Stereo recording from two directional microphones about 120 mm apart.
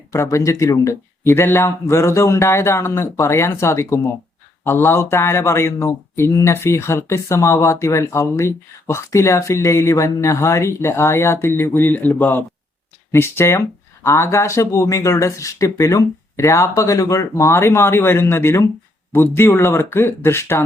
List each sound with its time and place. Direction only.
0.1 s speech: 25° left (ahead or behind)